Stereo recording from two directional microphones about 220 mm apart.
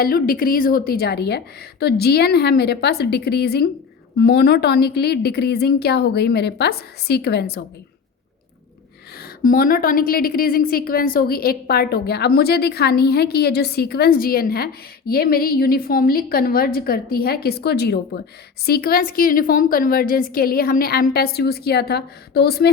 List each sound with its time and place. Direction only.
0.0 s a woman's voice: 40° left (ahead or behind)
9.4 s a woman's voice: 40° left (ahead or behind)